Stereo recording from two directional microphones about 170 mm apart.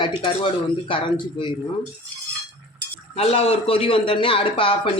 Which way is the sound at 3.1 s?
35° left (ahead or behind).